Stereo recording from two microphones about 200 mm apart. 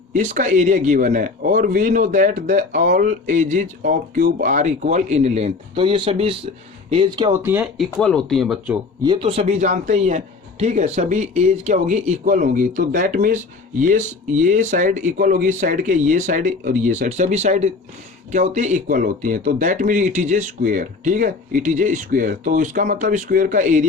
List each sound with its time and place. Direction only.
0.1 s speech: 35° right (ahead or behind)
7.4 s speech: 10° right (ahead or behind)
7.9 s speech: 5° left (ahead or behind)
9.0 s speech: 25° right (ahead or behind)